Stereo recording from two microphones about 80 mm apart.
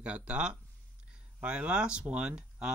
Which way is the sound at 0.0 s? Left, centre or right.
Centre.